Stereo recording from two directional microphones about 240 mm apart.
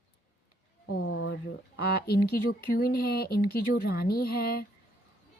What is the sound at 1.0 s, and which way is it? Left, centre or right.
Speech, left.